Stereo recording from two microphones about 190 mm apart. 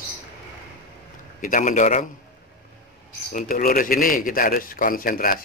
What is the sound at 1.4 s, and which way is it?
Speech, 45° left (ahead or behind).